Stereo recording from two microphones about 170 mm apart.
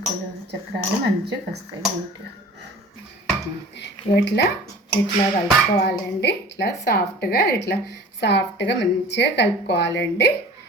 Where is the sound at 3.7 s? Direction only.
90° left.